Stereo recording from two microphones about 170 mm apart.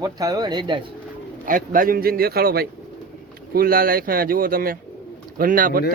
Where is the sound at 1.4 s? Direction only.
55° right (ahead or behind).